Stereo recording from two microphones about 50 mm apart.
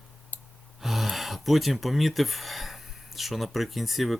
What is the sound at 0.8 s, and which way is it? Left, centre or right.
Speech, centre.